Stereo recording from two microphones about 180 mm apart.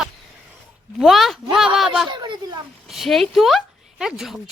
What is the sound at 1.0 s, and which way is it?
Speech, centre (ahead or behind).